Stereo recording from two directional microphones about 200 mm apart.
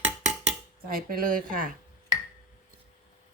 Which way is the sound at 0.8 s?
45° right (ahead or behind).